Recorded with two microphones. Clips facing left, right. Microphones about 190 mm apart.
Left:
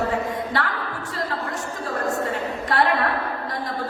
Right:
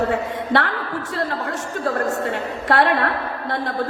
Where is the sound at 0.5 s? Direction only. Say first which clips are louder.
Right 7 dB; 70° right (ahead or behind).